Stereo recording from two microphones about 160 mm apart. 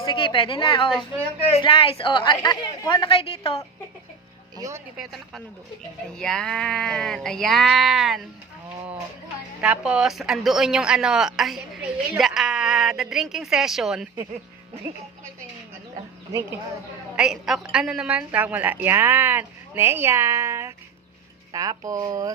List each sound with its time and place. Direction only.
0.0 s a woman's voice: 30° left (ahead or behind)
4.5 s speech: 20° right (ahead or behind)
4.9 s speech: centre (ahead or behind)
9.6 s speech: 5° right (ahead or behind)
17.2 s a woman's voice: 5° right (ahead or behind); by 22.3 s 20° right (ahead or behind)